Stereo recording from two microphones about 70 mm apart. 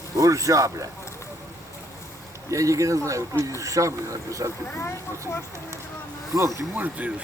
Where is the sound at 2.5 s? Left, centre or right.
Right.